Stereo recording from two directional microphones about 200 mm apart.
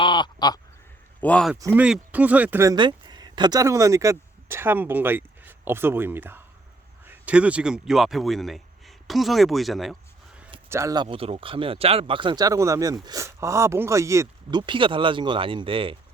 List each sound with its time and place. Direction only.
0.0 s crow: 20° left (ahead or behind)
1.2 s a man's voice: 5° left (ahead or behind)
1.5 s speech: 10° right (ahead or behind)
10.7 s speech: 15° right (ahead or behind)